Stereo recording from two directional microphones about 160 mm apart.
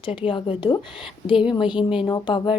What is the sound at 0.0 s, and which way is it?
Speech, 30° left (ahead or behind).